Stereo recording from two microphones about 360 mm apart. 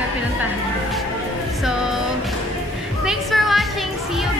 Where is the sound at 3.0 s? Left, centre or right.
Centre.